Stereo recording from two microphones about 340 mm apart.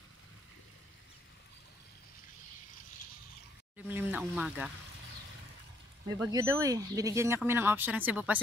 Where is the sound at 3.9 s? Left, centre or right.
Centre.